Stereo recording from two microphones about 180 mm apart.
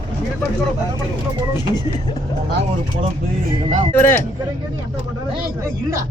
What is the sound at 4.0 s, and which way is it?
Speech, 10° left (ahead or behind).